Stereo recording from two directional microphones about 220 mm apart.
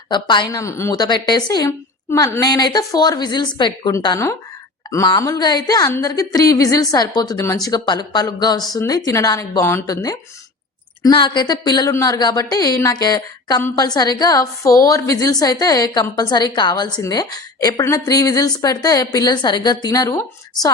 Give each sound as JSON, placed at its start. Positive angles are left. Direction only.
{"t": 0.1, "sound": "a woman's voice", "side_deg": 20}